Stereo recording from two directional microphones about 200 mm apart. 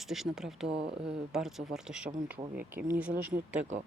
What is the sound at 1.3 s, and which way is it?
Speech, centre (ahead or behind).